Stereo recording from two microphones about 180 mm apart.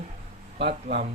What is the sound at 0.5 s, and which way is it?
Speech, 70° right (ahead or behind).